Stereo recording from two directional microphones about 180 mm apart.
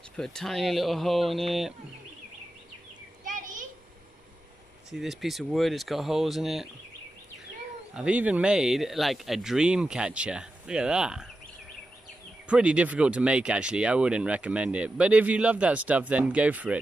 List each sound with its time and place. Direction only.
0.2 s speech: 5° left (ahead or behind)
3.3 s a sound: 45° right (ahead or behind)
4.9 s speech: centre (ahead or behind)
7.9 s speech: 5° right (ahead or behind)
12.4 s speech: 5° right (ahead or behind)